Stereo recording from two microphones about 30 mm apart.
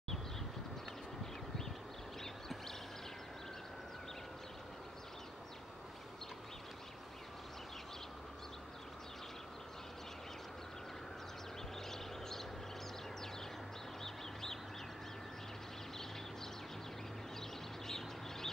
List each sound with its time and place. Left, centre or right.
11.9 s vehicle: centre
14.0 s bird: centre
17.8 s bird: centre